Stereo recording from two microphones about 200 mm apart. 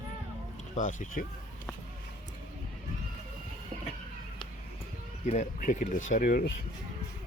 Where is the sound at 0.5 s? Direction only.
40° left (ahead or behind).